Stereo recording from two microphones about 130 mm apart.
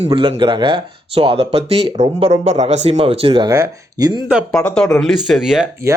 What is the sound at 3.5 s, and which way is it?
Speech, 25° right (ahead or behind).